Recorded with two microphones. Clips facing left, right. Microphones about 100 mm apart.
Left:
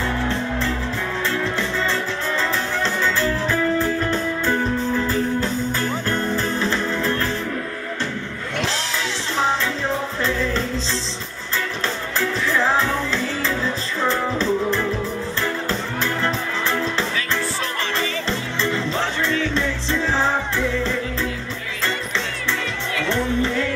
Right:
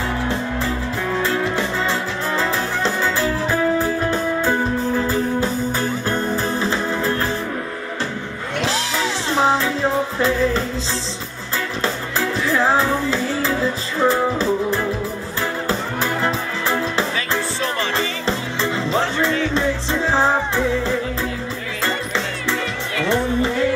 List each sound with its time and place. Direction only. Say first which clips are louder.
0.3 s music: right 1 dB; 15° right (ahead or behind)
11.8 s music: right 3 dB; 15° right (ahead or behind)